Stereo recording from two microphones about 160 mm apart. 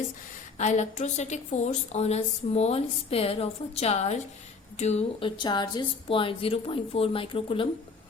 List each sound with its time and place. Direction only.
0.6 s a woman's voice: 45° left (ahead or behind)
5.4 s a woman's voice: 25° left (ahead or behind)